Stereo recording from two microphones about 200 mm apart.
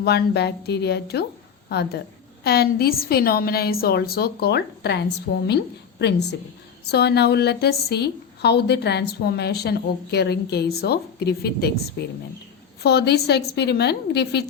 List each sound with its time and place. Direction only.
0.0 s a woman's voice: 55° left (ahead or behind)